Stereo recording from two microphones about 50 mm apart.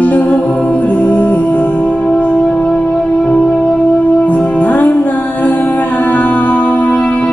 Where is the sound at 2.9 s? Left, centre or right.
Centre.